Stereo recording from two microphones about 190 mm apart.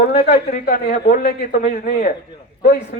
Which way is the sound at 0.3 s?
45° left (ahead or behind).